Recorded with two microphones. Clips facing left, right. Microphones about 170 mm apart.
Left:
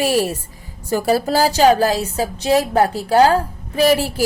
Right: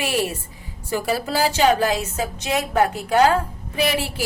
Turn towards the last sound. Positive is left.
turn(degrees=40)  # may be behind; listen again after turning